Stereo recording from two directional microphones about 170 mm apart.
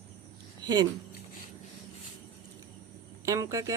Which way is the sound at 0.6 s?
25° right (ahead or behind).